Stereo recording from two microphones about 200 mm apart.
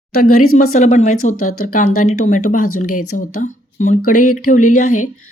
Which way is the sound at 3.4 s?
40° left (ahead or behind).